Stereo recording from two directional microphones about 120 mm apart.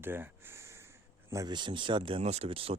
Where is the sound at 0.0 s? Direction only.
20° right (ahead or behind).